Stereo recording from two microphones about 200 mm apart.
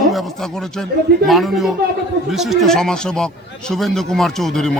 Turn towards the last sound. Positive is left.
turn(degrees=0)  # may be behind; listen again after turning